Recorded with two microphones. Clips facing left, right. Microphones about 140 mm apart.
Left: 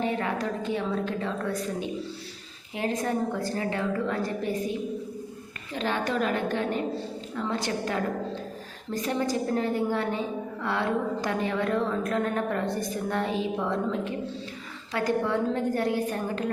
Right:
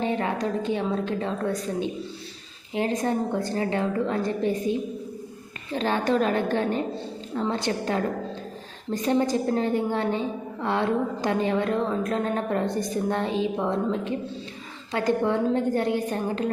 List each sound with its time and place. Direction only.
0.0 s a woman's voice: 25° right (ahead or behind)
2.7 s a woman's voice: 25° right (ahead or behind)
5.7 s a woman's voice: 35° right (ahead or behind)